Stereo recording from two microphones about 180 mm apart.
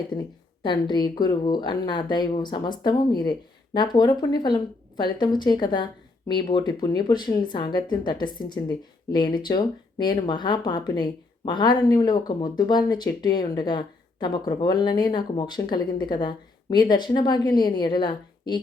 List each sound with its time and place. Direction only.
0.1 s speech: 25° left (ahead or behind)